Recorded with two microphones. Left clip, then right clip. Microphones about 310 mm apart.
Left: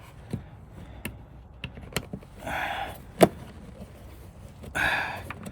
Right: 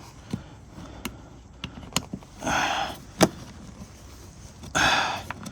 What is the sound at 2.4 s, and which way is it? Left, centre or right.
Sniff, right.